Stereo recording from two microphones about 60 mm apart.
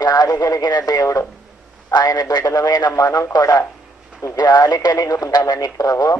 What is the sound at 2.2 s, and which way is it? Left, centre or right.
Speech, left.